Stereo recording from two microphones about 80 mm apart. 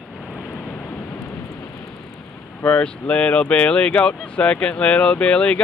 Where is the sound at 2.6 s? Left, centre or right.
Centre.